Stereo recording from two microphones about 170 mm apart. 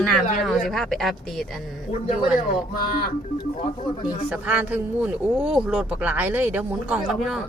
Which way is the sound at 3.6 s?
25° left (ahead or behind).